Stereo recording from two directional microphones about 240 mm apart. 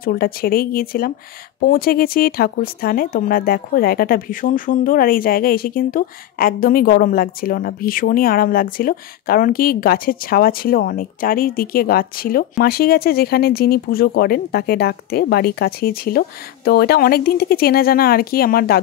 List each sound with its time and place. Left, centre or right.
0.0 s speech: left